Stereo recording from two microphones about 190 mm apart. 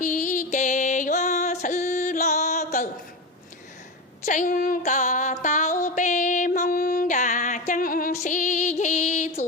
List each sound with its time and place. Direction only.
0.0 s music: 40° left (ahead or behind)
4.3 s music: 45° left (ahead or behind)
7.7 s female singing: 45° left (ahead or behind)